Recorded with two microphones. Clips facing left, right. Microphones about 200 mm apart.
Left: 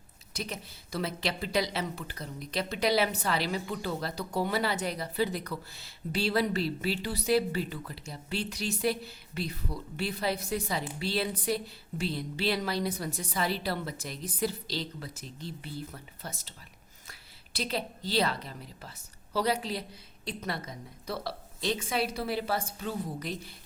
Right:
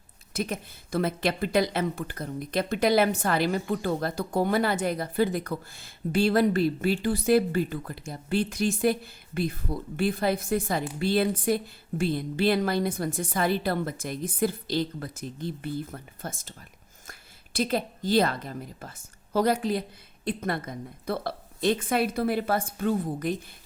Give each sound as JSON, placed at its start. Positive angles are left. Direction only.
{"t": 0.3, "sound": "a woman's voice", "side_deg": -50}